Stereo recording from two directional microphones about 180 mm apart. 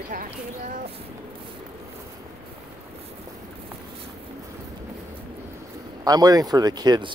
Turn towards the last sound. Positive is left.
turn(degrees=-25)  # may be behind; listen again after turning